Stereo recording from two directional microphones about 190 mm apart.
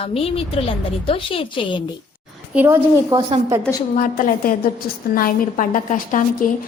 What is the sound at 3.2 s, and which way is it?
Speech, 30° right (ahead or behind).